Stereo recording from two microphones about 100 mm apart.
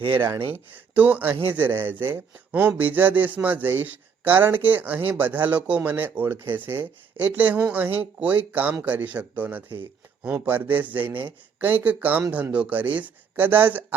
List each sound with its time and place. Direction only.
0.7 s speech: 15° right (ahead or behind)